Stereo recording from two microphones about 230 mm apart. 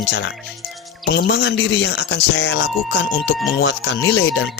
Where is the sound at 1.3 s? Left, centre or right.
Left.